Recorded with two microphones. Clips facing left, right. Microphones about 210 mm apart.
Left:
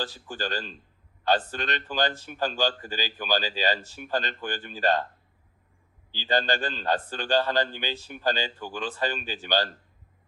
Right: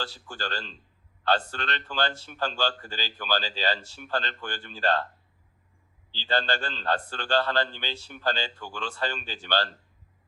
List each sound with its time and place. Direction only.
0.0 s a man's voice: 15° left (ahead or behind)
6.1 s a man's voice: 15° left (ahead or behind)